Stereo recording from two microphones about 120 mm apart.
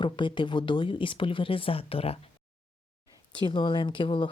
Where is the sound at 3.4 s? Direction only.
40° left (ahead or behind).